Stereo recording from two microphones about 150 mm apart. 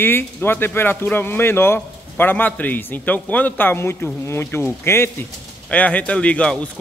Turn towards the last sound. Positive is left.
turn(degrees=5)  # may be behind; listen again after turning